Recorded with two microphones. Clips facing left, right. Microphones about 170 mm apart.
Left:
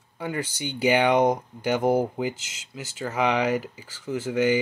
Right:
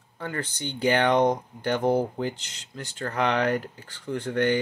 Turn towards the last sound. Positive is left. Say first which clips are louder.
# left 2 dB
turn(degrees=5)  # may be behind; listen again after turning